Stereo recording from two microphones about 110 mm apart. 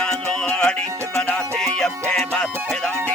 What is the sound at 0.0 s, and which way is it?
Music, 10° left (ahead or behind).